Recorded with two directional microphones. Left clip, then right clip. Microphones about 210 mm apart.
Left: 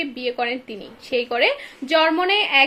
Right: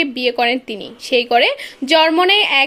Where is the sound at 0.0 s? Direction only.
50° right (ahead or behind).